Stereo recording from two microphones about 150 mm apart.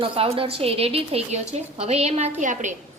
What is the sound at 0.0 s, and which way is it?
A woman's voice, 40° right (ahead or behind).